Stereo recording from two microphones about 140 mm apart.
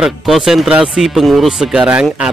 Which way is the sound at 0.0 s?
5° right (ahead or behind).